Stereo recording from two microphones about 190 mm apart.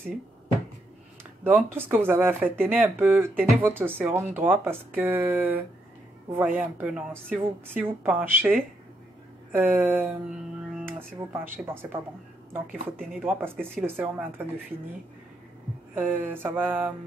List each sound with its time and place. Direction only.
1.4 s speech: 10° right (ahead or behind)
9.5 s speech: 10° right (ahead or behind)
13.0 s speech: 5° right (ahead or behind)
13.6 s speech: 5° left (ahead or behind)
13.8 s speech: 10° right (ahead or behind)
15.9 s speech: 10° right (ahead or behind)